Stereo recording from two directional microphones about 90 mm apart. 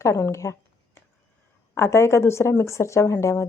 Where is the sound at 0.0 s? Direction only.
35° left (ahead or behind).